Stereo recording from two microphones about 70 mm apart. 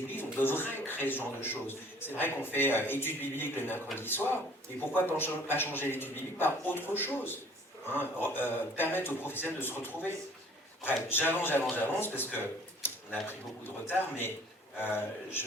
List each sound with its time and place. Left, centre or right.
0.2 s a man's voice: left